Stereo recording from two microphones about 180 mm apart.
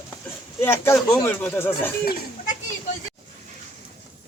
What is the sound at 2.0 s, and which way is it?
Speech, 55° left (ahead or behind).